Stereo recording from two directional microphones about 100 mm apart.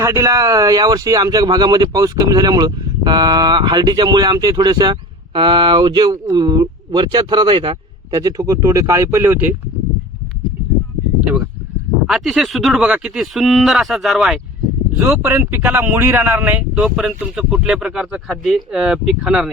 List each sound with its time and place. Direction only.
0.0 s speech: 30° right (ahead or behind); by 7.8 s 60° right (ahead or behind)
8.1 s speech: 40° right (ahead or behind); by 9.6 s 20° right (ahead or behind)
11.2 s speech: 15° right (ahead or behind)
12.0 s speech: centre (ahead or behind)
15.0 s speech: 20° right (ahead or behind)